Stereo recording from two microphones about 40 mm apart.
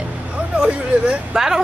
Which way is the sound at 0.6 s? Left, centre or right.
Right.